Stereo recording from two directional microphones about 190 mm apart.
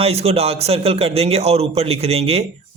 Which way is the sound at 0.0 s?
30° right (ahead or behind).